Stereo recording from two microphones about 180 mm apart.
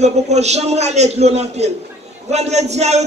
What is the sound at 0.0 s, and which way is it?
A man's voice, 40° right (ahead or behind).